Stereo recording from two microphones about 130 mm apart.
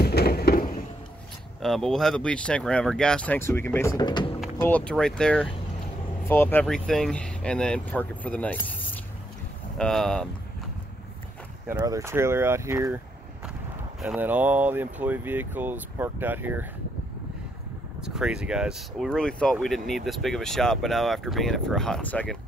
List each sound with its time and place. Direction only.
1.6 s speech: 5° left (ahead or behind); by 4.0 s 20° left (ahead or behind)
4.0 s speech: 35° left (ahead or behind)
4.6 s speech: 15° left (ahead or behind)
6.6 s speech: 5° left (ahead or behind)
11.8 s speech: 25° right (ahead or behind)
14.0 s speech: 10° right (ahead or behind)
18.0 s speech: 5° right (ahead or behind)